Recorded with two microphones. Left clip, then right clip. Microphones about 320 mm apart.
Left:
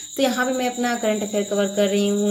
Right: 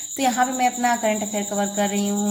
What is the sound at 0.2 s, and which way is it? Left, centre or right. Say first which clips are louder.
A woman's voice: right 1 dB; centre.